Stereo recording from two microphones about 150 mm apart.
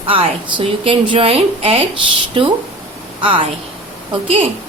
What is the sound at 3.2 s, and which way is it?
A woman's voice, 35° right (ahead or behind).